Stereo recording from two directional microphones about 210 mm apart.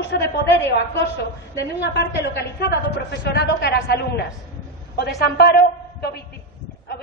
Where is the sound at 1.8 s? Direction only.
55° left (ahead or behind).